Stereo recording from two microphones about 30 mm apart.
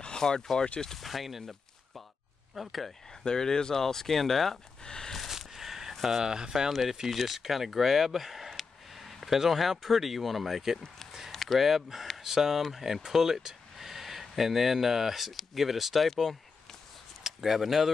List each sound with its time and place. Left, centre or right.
0.2 s speech: centre
0.9 s speech: centre
2.5 s speech: centre
3.3 s speech: left
4.8 s a sound: left
5.3 s a sound: centre
6.0 s speech: centre
6.3 s speech: right
6.7 s speech: centre
11.3 s a sound: centre
11.6 s speech: centre
16.1 s speech: centre
17.2 s speech: centre